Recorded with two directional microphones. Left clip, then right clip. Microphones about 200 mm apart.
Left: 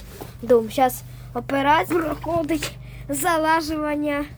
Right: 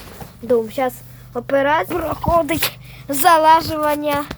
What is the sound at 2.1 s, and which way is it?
Speech, 40° right (ahead or behind).